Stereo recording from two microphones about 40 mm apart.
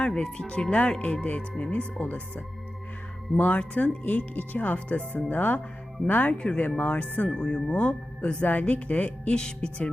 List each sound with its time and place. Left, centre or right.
0.0 s speech: left
7.3 s speech: left
8.4 s speech: left